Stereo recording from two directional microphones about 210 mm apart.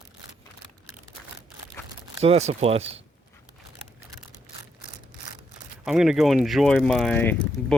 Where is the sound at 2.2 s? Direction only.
30° right (ahead or behind).